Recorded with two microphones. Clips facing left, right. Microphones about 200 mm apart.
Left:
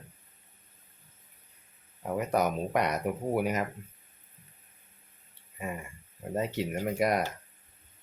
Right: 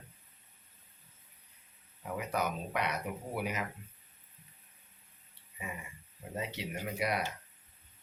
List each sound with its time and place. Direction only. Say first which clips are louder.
2.1 s speech: left 7 dB; 45° left (ahead or behind)
5.5 s speech: left 7 dB; 50° left (ahead or behind)